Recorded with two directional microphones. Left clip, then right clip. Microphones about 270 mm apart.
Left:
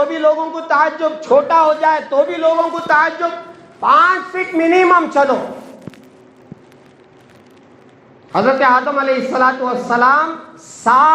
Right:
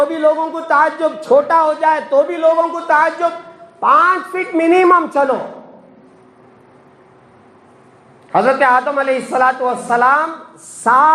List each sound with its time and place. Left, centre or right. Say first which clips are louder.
0.0 s a man's voice: even; right
4.9 s a man's voice: even; right
8.3 s a man's voice: even; right